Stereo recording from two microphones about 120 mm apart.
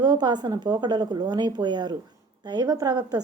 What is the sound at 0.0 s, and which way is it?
A woman's voice, 35° right (ahead or behind).